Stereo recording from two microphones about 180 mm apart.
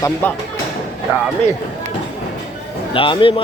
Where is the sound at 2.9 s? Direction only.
30° left (ahead or behind).